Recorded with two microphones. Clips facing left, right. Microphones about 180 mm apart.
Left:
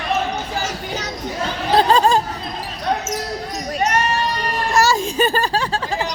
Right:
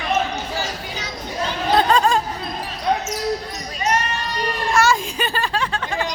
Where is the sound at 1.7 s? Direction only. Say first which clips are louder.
Left 3 dB; 30° left (ahead or behind).